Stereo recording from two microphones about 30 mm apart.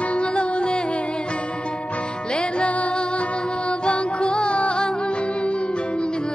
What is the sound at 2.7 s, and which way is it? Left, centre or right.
Music, left.